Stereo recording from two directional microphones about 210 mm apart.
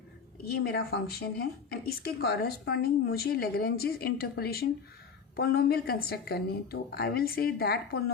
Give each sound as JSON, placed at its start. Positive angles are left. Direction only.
{"t": 0.4, "sound": "speech", "side_deg": 50}